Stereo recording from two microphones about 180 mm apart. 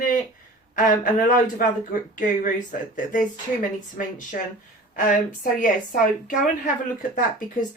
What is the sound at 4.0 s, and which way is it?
Speech, 50° left (ahead or behind).